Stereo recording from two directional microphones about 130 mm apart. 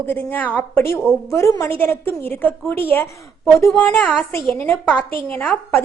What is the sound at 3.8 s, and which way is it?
A woman's voice, 10° left (ahead or behind).